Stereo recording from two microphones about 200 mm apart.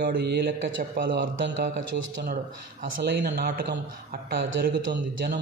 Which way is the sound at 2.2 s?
40° right (ahead or behind).